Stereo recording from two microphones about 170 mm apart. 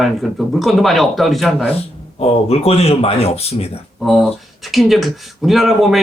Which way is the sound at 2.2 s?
35° left (ahead or behind).